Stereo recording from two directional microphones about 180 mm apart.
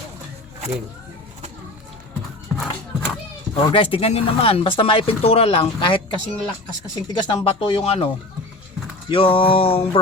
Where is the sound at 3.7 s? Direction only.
30° left (ahead or behind).